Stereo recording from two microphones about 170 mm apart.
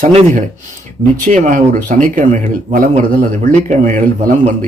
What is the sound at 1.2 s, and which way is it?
Speech, 50° right (ahead or behind).